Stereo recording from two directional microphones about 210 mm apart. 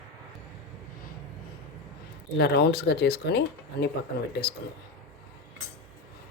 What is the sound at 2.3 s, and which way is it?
A woman's voice, 50° left (ahead or behind).